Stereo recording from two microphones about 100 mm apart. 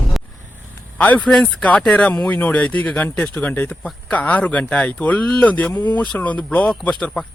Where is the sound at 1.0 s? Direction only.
15° left (ahead or behind).